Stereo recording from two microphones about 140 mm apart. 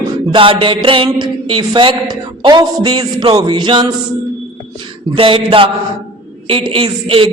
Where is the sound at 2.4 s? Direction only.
30° right (ahead or behind).